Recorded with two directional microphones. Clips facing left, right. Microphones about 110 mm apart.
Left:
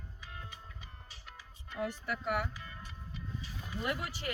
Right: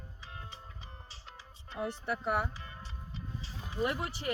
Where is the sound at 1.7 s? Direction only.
30° right (ahead or behind).